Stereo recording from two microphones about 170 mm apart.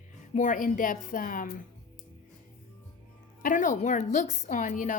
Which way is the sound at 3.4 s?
50° left (ahead or behind).